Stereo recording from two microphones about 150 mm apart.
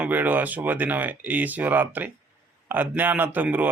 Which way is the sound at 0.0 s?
10° right (ahead or behind).